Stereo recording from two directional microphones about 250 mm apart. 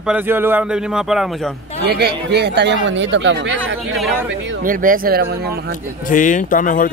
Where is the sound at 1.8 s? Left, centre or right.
Right.